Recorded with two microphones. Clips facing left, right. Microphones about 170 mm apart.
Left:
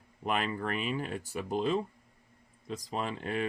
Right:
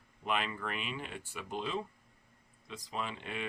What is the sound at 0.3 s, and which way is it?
Speech, 45° left (ahead or behind).